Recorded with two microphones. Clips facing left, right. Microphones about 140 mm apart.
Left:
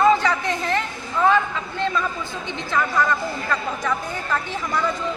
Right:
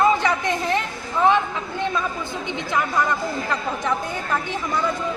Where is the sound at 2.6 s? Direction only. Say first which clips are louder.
Left 1 dB; 15° right (ahead or behind).